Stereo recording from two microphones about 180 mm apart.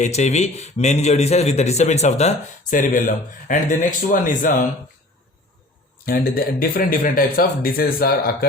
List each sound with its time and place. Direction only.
0.0 s speech: 40° left (ahead or behind)
6.1 s speech: 55° left (ahead or behind)